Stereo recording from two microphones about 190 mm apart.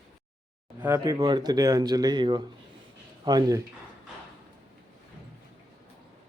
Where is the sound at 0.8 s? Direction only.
15° right (ahead or behind).